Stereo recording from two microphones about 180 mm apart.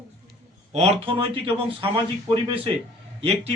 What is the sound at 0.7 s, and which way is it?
A man's voice, 35° right (ahead or behind).